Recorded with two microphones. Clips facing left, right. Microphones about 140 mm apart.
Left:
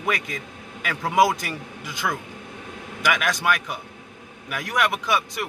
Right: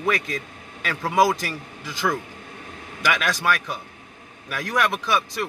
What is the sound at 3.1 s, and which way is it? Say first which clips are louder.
A man's voice: even; 15° left (ahead or behind).